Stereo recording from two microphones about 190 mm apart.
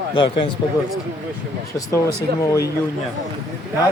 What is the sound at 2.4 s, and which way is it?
Speech, 15° left (ahead or behind).